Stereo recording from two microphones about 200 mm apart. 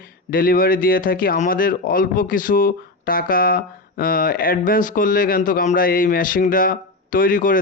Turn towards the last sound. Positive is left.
turn(degrees=40)  # may be behind; listen again after turning